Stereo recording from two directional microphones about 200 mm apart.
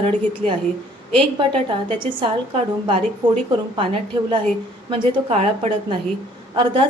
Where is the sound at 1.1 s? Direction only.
25° right (ahead or behind).